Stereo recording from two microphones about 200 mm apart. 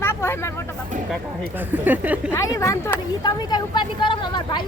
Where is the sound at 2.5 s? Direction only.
15° left (ahead or behind).